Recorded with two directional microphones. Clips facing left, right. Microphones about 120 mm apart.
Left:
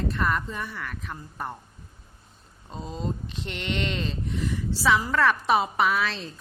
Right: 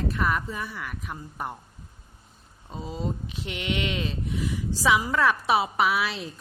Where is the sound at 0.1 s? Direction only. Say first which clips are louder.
Even; 5° right (ahead or behind).